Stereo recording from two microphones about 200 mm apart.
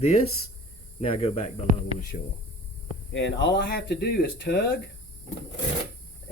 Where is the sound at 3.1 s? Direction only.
65° left (ahead or behind).